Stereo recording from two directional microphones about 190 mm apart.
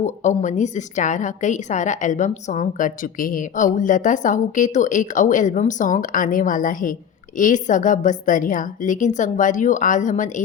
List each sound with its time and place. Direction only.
0.0 s a woman's voice: 40° left (ahead or behind)